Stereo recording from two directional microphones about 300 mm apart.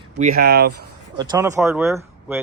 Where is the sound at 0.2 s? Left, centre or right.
Right.